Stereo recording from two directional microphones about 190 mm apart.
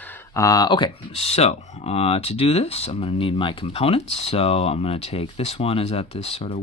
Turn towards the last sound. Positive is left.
turn(degrees=30)  # may be behind; listen again after turning